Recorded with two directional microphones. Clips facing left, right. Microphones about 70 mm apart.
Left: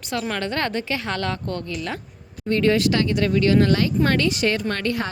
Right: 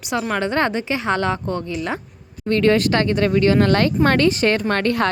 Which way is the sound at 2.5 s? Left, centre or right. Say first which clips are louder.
Right 3 dB; right.